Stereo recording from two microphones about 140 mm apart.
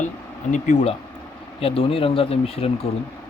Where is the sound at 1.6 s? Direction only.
45° left (ahead or behind).